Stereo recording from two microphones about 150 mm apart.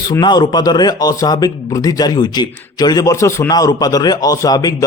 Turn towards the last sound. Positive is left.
turn(degrees=25)  # may be behind; listen again after turning